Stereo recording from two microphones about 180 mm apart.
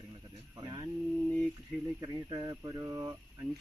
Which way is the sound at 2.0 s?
25° right (ahead or behind).